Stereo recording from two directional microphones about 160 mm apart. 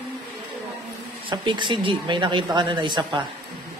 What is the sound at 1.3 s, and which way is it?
Speech, 30° right (ahead or behind).